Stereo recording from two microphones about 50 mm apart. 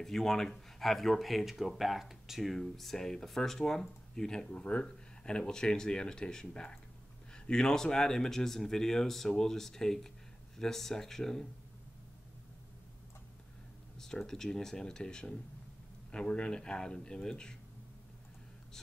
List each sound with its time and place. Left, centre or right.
0.0 s speech: centre
13.9 s speech: centre